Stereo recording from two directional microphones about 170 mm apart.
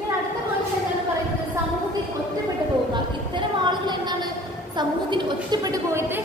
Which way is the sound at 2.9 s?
25° right (ahead or behind).